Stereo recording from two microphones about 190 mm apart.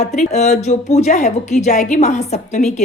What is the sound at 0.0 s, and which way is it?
A woman's voice, 35° left (ahead or behind).